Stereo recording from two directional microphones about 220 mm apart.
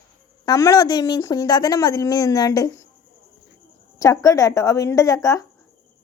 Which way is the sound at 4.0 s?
15° left (ahead or behind).